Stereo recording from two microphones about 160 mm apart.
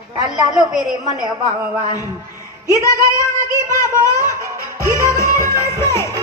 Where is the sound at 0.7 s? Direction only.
Centre (ahead or behind).